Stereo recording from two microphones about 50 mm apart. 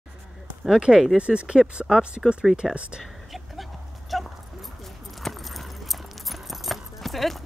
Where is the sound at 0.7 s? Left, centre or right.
Centre.